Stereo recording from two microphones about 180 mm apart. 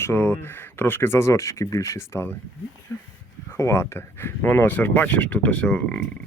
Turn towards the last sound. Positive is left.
turn(degrees=5)  # may be behind; listen again after turning